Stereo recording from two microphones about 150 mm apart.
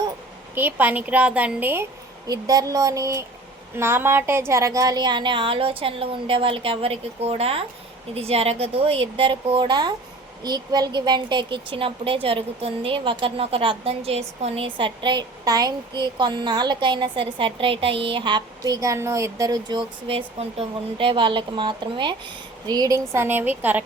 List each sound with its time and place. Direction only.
0.5 s a woman's voice: 10° right (ahead or behind)